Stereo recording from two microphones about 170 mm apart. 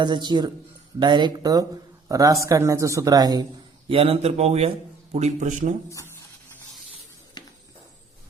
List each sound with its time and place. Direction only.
0.0 s speech: 25° right (ahead or behind)
3.8 s a man's voice: 35° right (ahead or behind)
7.4 s a sound: 25° left (ahead or behind)